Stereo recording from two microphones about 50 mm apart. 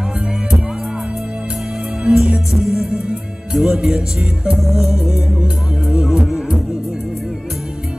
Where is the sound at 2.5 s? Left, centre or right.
Centre.